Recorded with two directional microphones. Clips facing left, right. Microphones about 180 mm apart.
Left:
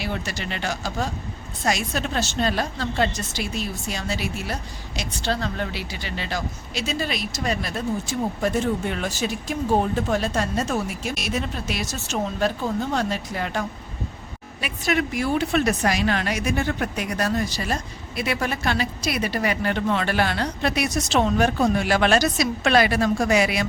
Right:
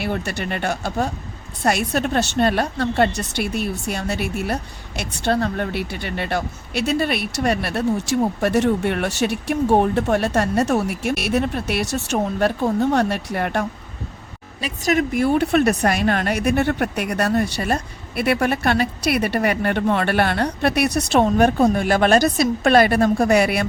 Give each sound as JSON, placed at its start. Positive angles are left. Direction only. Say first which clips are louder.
{"t": 0.0, "sound": "a woman's voice", "louder": "right 5 dB", "side_deg": -60}
{"t": 14.6, "sound": "a woman's voice", "louder": "right 4 dB", "side_deg": -40}